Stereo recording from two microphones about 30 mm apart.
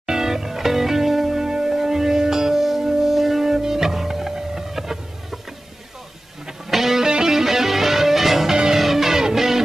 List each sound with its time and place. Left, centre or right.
0.0 s music: centre
6.7 s music: centre
7.1 s music: right
8.5 s music: right
8.7 s music: centre